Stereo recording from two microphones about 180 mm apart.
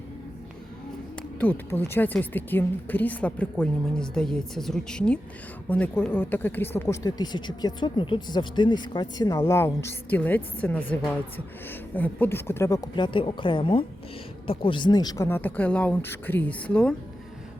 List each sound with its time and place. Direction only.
1.4 s speech: 10° left (ahead or behind)
11.9 s a woman's voice: 10° left (ahead or behind)